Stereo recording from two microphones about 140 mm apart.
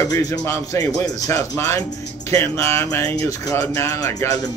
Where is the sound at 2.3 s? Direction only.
20° left (ahead or behind).